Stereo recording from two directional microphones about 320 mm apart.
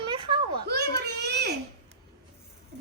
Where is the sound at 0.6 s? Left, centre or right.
Right.